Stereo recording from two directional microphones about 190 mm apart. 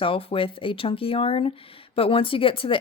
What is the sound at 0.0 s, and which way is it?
Speech, 30° left (ahead or behind).